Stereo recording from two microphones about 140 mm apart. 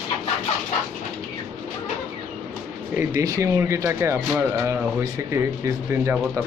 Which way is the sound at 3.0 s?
25° right (ahead or behind).